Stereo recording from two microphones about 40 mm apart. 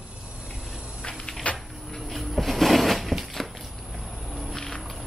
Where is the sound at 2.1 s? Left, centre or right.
Centre.